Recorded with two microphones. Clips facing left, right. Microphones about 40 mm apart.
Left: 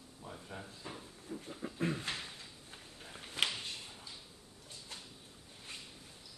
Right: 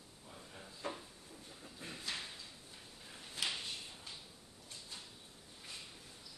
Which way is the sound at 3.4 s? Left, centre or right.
Left.